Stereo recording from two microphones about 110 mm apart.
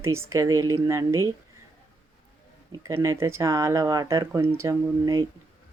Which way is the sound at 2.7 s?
30° right (ahead or behind).